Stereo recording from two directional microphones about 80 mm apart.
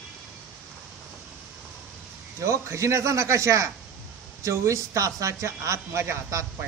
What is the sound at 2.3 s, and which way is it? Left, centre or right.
A man's voice, right.